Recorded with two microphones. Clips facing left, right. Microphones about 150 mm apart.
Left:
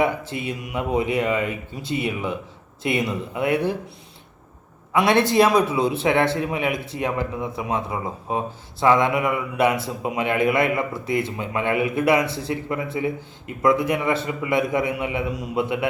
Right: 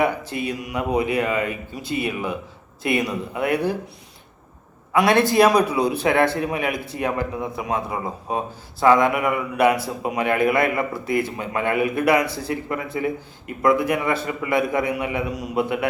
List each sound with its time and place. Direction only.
0.0 s a man's voice: 25° left (ahead or behind)
4.9 s a man's voice: 25° left (ahead or behind)